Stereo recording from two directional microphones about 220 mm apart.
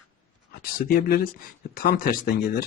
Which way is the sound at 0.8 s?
45° left (ahead or behind).